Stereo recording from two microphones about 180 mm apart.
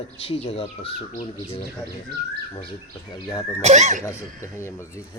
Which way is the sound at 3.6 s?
40° right (ahead or behind).